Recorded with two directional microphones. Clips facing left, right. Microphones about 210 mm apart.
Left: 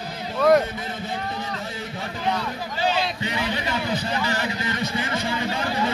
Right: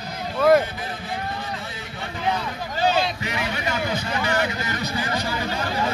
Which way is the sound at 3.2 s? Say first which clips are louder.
Left 1 dB; 30° left (ahead or behind).